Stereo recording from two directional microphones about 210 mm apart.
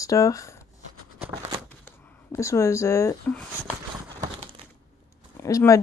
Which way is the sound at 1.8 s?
15° left (ahead or behind).